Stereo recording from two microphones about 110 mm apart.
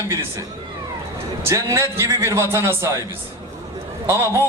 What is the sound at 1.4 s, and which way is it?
Speech, 25° right (ahead or behind).